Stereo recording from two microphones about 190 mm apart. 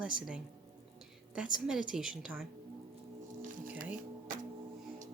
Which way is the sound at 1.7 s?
5° right (ahead or behind).